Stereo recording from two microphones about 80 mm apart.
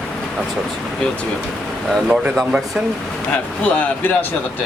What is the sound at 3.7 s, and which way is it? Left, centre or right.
Speech, centre.